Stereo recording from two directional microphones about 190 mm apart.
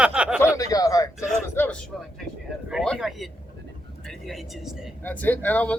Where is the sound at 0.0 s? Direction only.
5° right (ahead or behind).